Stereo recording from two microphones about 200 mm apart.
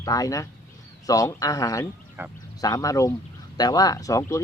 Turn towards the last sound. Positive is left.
turn(degrees=15)  # may be behind; listen again after turning